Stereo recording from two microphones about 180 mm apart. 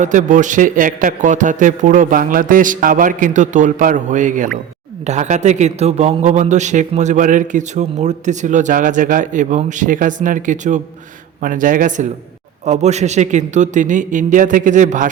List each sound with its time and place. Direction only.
0.0 s a man's voice: 45° right (ahead or behind)